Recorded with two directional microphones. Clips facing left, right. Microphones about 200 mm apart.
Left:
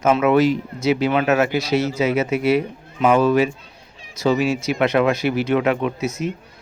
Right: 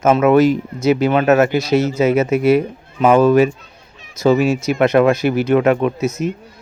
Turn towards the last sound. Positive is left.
turn(degrees=-45)  # may be behind; listen again after turning